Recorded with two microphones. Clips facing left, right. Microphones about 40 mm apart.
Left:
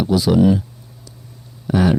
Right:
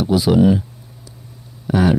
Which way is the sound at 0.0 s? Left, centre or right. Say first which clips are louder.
Right 1 dB; centre.